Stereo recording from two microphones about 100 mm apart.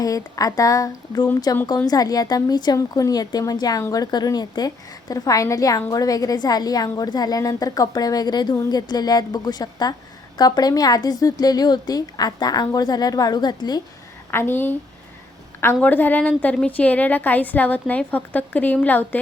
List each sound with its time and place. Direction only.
0.0 s a woman's voice: 35° left (ahead or behind)
14.3 s a woman's voice: 20° left (ahead or behind)
15.8 s a woman's voice: 20° left (ahead or behind)